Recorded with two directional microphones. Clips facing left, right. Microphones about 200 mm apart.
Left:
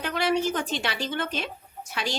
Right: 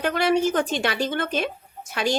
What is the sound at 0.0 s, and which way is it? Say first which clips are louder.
A woman's voice: right 4 dB; 50° right (ahead or behind).